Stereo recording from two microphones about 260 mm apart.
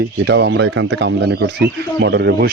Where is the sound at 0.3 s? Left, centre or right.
Right.